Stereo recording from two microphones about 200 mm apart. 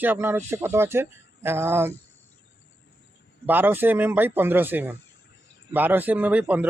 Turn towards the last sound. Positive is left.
turn(degrees=-10)  # may be behind; listen again after turning